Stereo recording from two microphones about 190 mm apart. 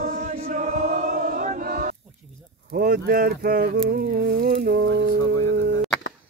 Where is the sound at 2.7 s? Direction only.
50° right (ahead or behind).